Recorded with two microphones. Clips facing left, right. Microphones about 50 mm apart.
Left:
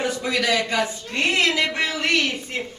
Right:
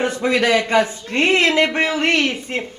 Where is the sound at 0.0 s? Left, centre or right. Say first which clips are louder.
Right 5 dB; right.